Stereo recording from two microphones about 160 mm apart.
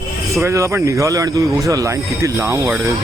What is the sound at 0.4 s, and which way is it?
Speech, 15° right (ahead or behind).